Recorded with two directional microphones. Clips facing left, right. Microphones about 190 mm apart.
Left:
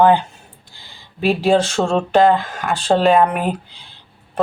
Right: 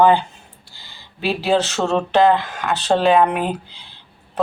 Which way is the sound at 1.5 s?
10° left (ahead or behind).